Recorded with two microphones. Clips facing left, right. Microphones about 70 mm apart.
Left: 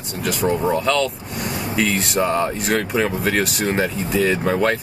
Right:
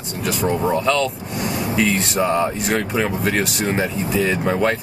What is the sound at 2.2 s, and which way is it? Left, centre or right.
Speech, centre.